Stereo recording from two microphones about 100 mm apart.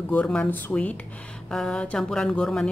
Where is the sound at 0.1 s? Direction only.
10° left (ahead or behind).